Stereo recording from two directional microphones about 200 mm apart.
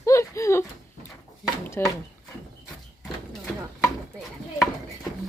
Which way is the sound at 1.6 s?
10° left (ahead or behind).